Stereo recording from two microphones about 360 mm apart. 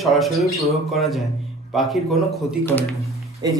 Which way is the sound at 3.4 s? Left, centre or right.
Centre.